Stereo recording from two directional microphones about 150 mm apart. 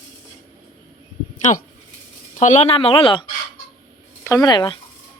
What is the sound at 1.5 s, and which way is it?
Speech, 55° left (ahead or behind).